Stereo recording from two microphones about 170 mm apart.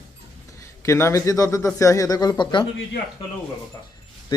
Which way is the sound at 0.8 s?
15° left (ahead or behind).